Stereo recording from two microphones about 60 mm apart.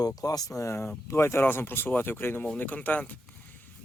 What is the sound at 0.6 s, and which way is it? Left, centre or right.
Speech, left.